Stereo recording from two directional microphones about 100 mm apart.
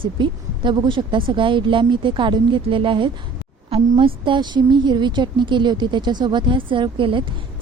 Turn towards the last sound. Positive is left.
turn(degrees=-60)  # may be behind; listen again after turning